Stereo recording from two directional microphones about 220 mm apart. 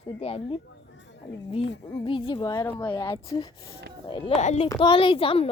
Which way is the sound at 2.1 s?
20° left (ahead or behind).